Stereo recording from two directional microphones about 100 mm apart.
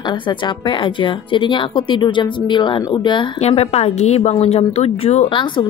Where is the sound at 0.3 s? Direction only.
50° left (ahead or behind).